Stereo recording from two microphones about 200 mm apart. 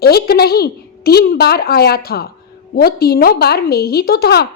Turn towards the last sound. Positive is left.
turn(degrees=50)  # may be behind; listen again after turning